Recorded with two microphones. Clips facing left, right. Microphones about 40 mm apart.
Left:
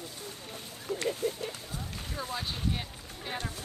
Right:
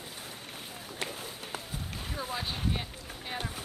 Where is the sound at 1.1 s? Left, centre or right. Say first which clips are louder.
Left 8 dB; centre.